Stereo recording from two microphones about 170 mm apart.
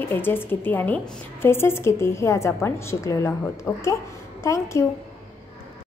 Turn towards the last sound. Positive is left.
turn(degrees=15)  # may be behind; listen again after turning